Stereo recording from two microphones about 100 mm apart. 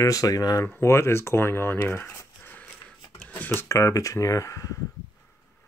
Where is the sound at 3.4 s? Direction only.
30° left (ahead or behind).